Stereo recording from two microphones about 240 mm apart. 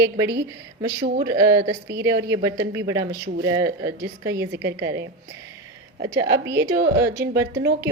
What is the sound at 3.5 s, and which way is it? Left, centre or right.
Speech, centre.